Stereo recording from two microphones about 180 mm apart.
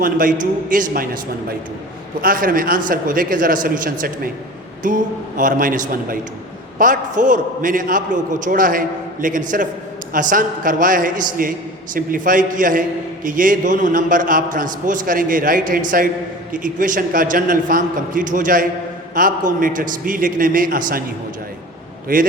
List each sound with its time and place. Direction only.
0.0 s a man's voice: 50° right (ahead or behind)
2.2 s a man's voice: 50° right (ahead or behind)
5.4 s a man's voice: 50° right (ahead or behind)
22.1 s a man's voice: 50° right (ahead or behind)